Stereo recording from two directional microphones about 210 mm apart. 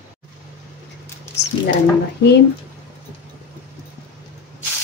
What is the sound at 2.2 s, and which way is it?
Speech, 55° left (ahead or behind).